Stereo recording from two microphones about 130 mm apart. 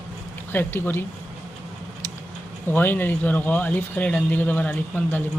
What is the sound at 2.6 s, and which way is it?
Speech, 15° left (ahead or behind).